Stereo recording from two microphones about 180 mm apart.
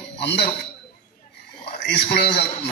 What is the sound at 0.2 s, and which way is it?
Speech, 70° left (ahead or behind).